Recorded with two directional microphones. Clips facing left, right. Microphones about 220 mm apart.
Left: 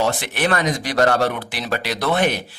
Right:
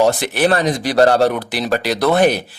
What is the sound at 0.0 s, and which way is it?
Speech, 35° right (ahead or behind).